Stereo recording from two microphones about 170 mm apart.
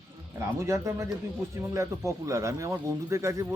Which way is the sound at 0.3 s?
15° right (ahead or behind).